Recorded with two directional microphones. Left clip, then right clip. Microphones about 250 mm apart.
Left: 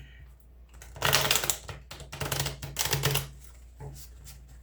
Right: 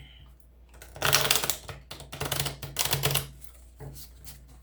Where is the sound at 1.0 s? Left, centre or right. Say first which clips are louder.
Right 1 dB; centre.